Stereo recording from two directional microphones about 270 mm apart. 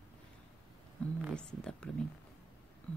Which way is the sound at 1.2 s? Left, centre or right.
Centre.